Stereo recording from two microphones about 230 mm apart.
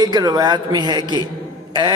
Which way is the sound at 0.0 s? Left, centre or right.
Centre.